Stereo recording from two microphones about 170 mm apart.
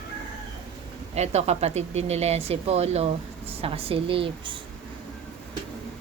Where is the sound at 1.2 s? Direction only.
40° right (ahead or behind).